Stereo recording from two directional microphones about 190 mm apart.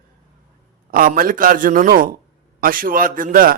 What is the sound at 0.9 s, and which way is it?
A man's voice, 50° right (ahead or behind).